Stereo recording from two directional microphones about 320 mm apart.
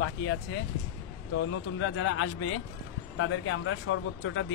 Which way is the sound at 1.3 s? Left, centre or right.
Left.